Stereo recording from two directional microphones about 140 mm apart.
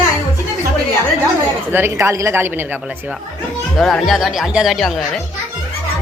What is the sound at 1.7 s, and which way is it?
A woman's voice, 15° right (ahead or behind).